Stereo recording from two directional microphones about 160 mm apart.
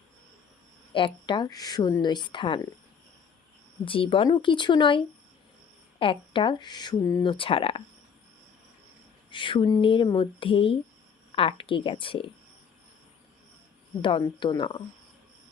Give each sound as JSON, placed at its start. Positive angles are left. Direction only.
{"t": 0.9, "sound": "speech", "side_deg": 30}
{"t": 3.8, "sound": "speech", "side_deg": 35}
{"t": 9.3, "sound": "speech", "side_deg": 30}
{"t": 14.0, "sound": "speech", "side_deg": 30}